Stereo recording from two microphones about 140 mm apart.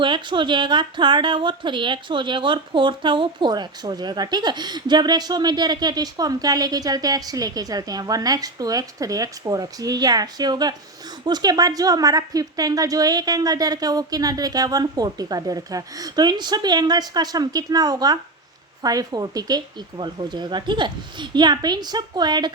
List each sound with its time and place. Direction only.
0.0 s speech: 35° right (ahead or behind)